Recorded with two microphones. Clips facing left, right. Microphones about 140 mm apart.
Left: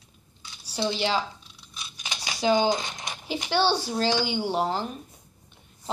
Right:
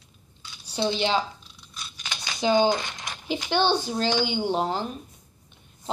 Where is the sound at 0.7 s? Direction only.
25° right (ahead or behind).